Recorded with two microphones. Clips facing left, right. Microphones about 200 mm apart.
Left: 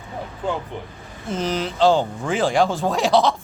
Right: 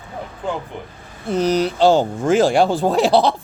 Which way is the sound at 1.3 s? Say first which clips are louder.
Right 7 dB; 40° right (ahead or behind).